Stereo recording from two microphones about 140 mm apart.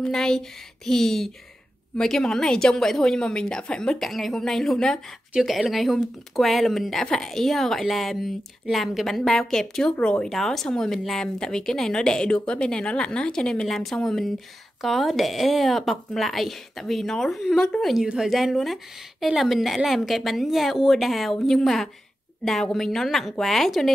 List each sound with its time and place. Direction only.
0.0 s speech: 5° left (ahead or behind)